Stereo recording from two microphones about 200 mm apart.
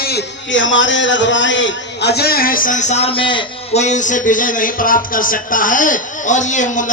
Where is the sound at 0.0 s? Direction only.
55° left (ahead or behind).